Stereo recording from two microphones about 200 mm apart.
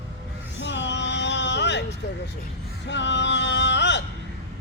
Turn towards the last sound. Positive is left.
turn(degrees=60)  # may be behind; listen again after turning